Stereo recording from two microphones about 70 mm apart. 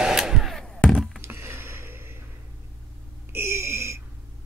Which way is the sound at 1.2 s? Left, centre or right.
Right.